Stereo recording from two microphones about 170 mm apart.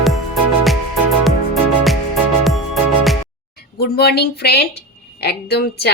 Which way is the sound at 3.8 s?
70° left (ahead or behind).